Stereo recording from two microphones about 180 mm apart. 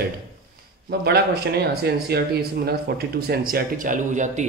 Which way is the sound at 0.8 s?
60° right (ahead or behind).